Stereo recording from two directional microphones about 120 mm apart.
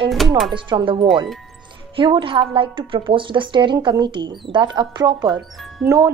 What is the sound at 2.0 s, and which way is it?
A woman's voice, 45° right (ahead or behind).